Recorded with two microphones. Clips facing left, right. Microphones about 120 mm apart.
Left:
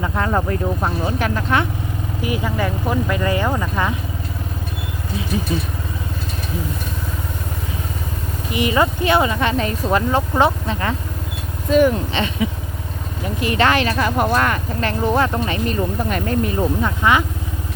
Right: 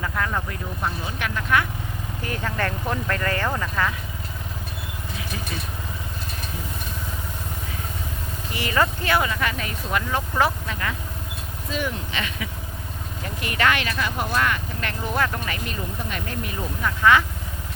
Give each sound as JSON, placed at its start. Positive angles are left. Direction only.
{"t": 0.0, "sound": "speech", "side_deg": 30}
{"t": 2.2, "sound": "speech", "side_deg": 10}
{"t": 5.3, "sound": "speech", "side_deg": 20}
{"t": 8.5, "sound": "speech", "side_deg": 20}
{"t": 11.7, "sound": "speech", "side_deg": 50}
{"t": 12.1, "sound": "speech", "side_deg": 30}
{"t": 15.6, "sound": "speech", "side_deg": 45}
{"t": 17.0, "sound": "speech", "side_deg": 20}